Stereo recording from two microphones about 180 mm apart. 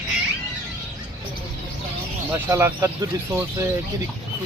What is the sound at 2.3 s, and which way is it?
Speech, 15° right (ahead or behind).